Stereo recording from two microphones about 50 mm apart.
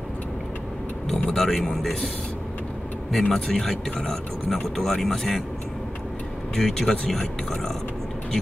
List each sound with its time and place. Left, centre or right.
1.0 s speech: centre
3.1 s speech: centre
6.5 s speech: centre